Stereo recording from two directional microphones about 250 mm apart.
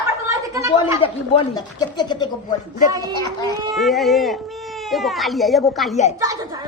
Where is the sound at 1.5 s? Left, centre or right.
Centre.